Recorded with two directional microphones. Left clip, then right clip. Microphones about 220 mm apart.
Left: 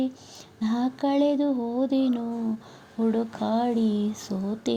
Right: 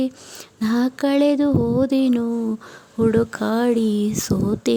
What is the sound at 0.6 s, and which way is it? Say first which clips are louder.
Speech: right 6 dB; 30° right (ahead or behind).